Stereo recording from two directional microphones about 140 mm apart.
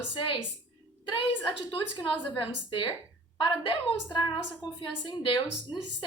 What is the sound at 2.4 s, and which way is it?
A woman's voice, 35° left (ahead or behind).